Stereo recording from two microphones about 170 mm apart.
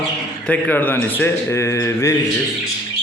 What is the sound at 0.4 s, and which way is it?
A man's voice, 10° left (ahead or behind).